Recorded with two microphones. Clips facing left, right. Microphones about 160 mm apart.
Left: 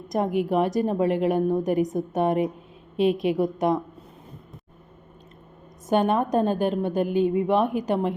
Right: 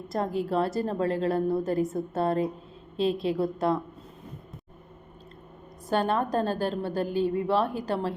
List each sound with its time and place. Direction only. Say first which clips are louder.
0.1 s a woman's voice: left 4 dB; 15° left (ahead or behind)
5.9 s a woman's voice: left 4 dB; 20° left (ahead or behind)